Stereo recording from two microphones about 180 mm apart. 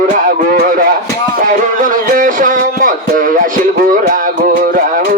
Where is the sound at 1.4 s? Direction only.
50° right (ahead or behind).